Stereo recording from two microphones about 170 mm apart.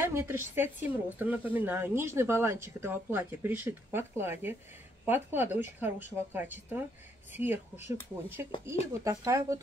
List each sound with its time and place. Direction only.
0.0 s speech: 15° right (ahead or behind)